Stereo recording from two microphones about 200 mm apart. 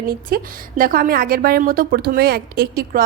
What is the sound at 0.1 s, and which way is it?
A woman's voice, 45° right (ahead or behind).